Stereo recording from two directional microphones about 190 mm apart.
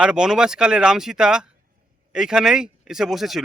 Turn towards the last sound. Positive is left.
turn(degrees=0)  # may be behind; listen again after turning